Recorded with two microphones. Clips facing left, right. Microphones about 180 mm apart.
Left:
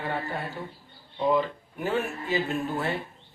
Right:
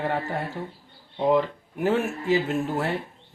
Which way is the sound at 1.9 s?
85° right.